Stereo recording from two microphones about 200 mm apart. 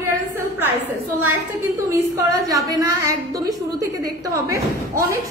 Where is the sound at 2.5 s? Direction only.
15° right (ahead or behind).